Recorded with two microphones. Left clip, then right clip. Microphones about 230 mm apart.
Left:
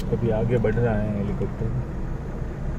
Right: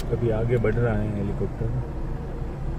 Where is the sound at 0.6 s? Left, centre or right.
Right.